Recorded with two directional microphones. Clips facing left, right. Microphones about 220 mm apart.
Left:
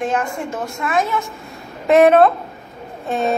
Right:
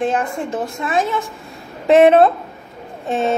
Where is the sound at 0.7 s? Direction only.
20° right (ahead or behind).